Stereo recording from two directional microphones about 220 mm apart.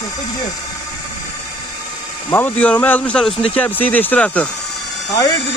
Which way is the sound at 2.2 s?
10° left (ahead or behind).